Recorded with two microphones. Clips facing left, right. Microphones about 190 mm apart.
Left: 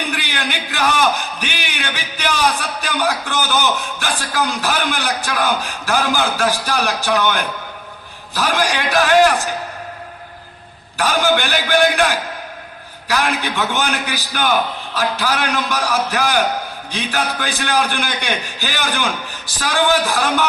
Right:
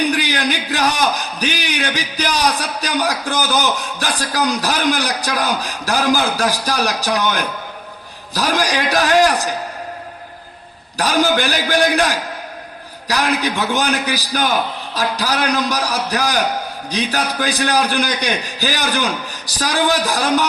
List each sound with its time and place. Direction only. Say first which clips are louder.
0.1 s a man's voice: right 5 dB; 35° right (ahead or behind)
10.9 s a man's voice: right 1 dB; 35° right (ahead or behind)